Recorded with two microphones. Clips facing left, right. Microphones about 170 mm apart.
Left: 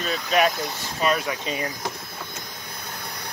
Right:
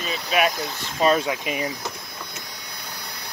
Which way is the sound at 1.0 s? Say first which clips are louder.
Right 4 dB; 30° right (ahead or behind).